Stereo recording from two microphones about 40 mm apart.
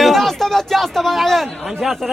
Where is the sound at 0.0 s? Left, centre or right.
Centre.